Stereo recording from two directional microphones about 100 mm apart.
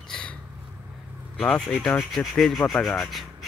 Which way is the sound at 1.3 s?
15° left (ahead or behind).